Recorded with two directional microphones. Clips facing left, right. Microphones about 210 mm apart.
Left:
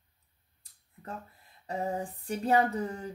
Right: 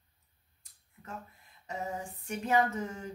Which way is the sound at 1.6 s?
35° left (ahead or behind).